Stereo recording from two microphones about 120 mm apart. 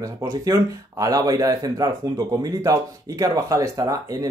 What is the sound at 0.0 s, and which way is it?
Speech, 30° right (ahead or behind).